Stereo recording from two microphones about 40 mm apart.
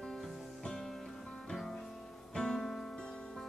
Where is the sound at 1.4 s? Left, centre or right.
Centre.